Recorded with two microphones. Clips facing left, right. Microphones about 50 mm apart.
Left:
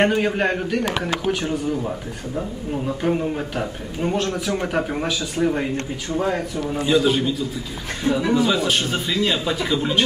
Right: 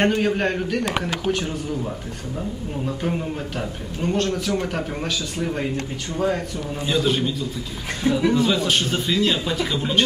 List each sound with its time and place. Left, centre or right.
0.0 s speech: centre
3.0 s speech: centre